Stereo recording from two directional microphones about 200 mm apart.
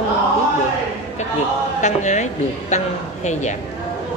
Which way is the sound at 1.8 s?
35° left (ahead or behind).